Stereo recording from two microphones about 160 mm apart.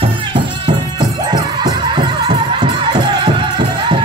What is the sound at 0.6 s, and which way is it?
Music, 25° right (ahead or behind).